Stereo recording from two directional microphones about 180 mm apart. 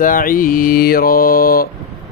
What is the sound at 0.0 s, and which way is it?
Mantra, 50° left (ahead or behind).